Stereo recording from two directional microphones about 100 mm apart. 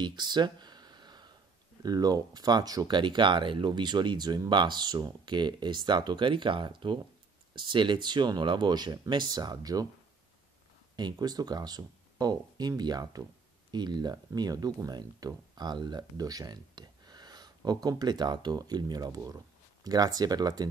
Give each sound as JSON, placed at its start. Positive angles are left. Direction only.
{"t": 0.0, "sound": "a sound", "side_deg": -45}
{"t": 1.8, "sound": "speech", "side_deg": -40}
{"t": 11.0, "sound": "speech", "side_deg": -45}